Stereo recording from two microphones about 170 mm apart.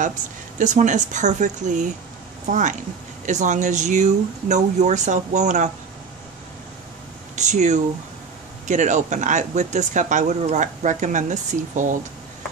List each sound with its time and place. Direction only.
0.6 s speech: 45° right (ahead or behind)
7.3 s speech: 45° right (ahead or behind)